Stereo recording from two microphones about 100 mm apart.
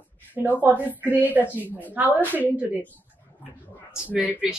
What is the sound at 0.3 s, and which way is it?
Speech, 15° right (ahead or behind).